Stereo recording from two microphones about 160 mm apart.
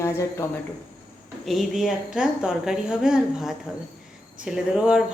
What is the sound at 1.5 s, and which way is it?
A woman's voice, centre (ahead or behind).